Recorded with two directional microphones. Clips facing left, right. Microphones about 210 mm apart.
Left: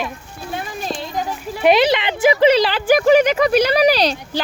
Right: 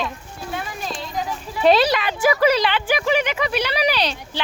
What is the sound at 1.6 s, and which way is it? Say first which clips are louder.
Speech: left 2 dB; 15° left (ahead or behind).